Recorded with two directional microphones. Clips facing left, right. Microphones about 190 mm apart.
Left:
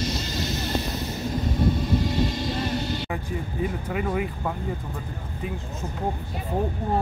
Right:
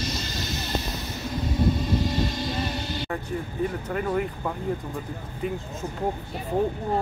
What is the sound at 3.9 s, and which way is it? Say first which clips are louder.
Speech: even; 5° left (ahead or behind).